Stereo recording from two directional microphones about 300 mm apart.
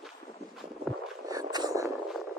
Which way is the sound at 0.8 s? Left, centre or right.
Centre.